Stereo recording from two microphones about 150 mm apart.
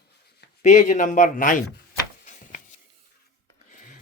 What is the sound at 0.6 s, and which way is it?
A man's voice, 50° left (ahead or behind).